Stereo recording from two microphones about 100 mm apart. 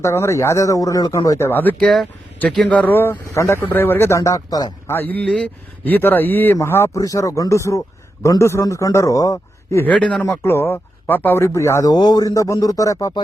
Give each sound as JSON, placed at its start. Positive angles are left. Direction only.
{"t": 0.0, "sound": "speech", "side_deg": 25}
{"t": 1.8, "sound": "speech", "side_deg": 5}
{"t": 2.6, "sound": "speech", "side_deg": 15}
{"t": 4.9, "sound": "speech", "side_deg": 20}
{"t": 9.8, "sound": "speech", "side_deg": 10}
{"t": 10.4, "sound": "speech", "side_deg": 25}
{"t": 11.9, "sound": "speech", "side_deg": 45}